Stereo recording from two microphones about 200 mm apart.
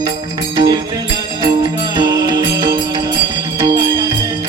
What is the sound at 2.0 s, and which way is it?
Music, 20° right (ahead or behind).